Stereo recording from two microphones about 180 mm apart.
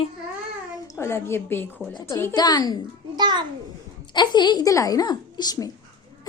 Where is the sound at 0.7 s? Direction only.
15° left (ahead or behind).